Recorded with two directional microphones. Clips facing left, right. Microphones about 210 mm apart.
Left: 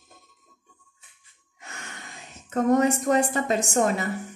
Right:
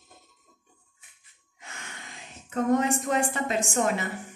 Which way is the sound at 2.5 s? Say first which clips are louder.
Left 3 dB; 40° left (ahead or behind).